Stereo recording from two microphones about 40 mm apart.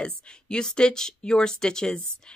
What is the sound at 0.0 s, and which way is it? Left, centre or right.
Speech, left.